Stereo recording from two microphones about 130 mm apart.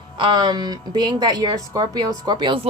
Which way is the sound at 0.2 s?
35° right (ahead or behind).